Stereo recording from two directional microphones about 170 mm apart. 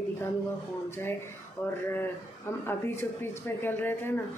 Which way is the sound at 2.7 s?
15° left (ahead or behind).